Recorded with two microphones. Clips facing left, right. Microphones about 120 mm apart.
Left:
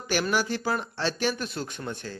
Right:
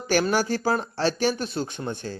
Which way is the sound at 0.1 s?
35° right (ahead or behind).